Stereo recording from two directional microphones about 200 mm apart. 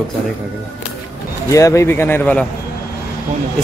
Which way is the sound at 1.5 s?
15° left (ahead or behind).